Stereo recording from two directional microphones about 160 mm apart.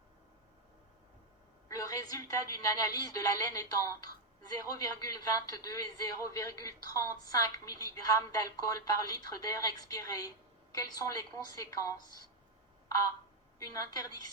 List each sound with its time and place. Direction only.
1.6 s a woman's voice: 20° left (ahead or behind)
13.6 s a woman's voice: 25° left (ahead or behind)